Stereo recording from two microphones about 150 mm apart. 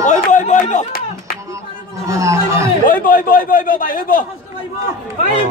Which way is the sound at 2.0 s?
20° right (ahead or behind).